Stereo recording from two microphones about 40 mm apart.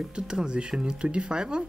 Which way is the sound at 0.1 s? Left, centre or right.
Right.